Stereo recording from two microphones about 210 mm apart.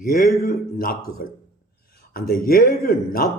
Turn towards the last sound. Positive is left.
turn(degrees=45)  # may be behind; listen again after turning